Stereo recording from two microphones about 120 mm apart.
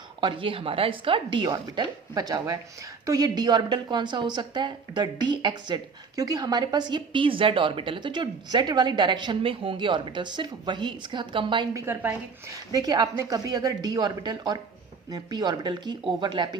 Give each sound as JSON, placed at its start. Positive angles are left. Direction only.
{"t": 0.2, "sound": "a woman's voice", "side_deg": -45}
{"t": 11.7, "sound": "a woman's voice", "side_deg": -20}
{"t": 12.7, "sound": "a woman's voice", "side_deg": -35}